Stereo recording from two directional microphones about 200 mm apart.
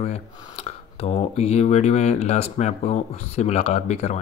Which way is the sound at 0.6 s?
30° left (ahead or behind).